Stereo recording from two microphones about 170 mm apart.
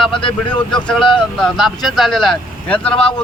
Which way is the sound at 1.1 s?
Centre (ahead or behind).